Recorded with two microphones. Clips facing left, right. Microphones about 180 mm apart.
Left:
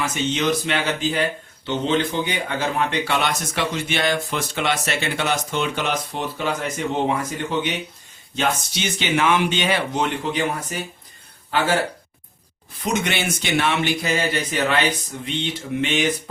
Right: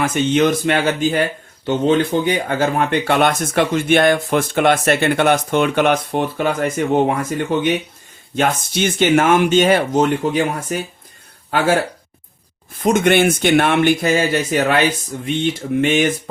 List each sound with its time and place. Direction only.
0.0 s speech: 55° right (ahead or behind)
12.8 s speech: 50° right (ahead or behind)